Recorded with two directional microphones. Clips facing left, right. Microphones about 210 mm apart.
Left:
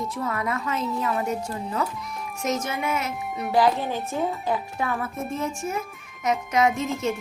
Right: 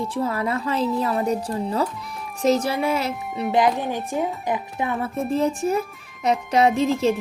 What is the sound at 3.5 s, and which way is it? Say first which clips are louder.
Speech: right 1 dB; 20° right (ahead or behind).